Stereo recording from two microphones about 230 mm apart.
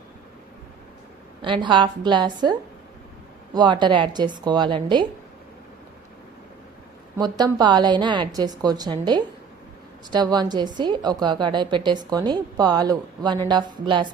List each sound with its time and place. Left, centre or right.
1.4 s a woman's voice: right
7.2 s a woman's voice: centre